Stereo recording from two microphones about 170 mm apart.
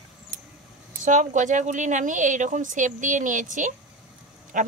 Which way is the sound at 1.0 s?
45° right (ahead or behind).